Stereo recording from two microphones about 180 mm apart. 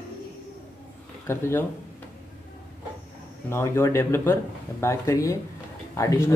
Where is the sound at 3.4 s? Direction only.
15° left (ahead or behind).